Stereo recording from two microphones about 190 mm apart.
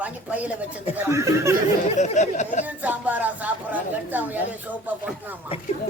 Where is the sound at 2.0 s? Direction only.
40° left (ahead or behind).